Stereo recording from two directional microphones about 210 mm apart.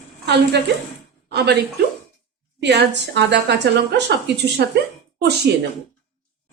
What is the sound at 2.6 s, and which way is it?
Speech, 55° right (ahead or behind).